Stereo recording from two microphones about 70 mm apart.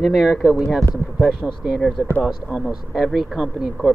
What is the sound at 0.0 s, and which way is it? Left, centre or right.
Speech, centre.